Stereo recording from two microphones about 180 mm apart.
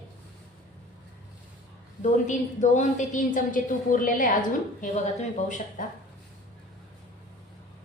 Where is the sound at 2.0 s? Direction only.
45° left (ahead or behind).